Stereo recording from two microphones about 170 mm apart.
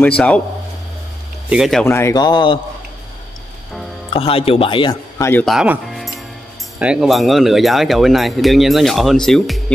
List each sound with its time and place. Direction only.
0.0 s speech: 5° left (ahead or behind)
1.5 s speech: centre (ahead or behind)
1.9 s speech: 15° left (ahead or behind)
4.1 s speech: 35° left (ahead or behind)
5.4 s speech: centre (ahead or behind)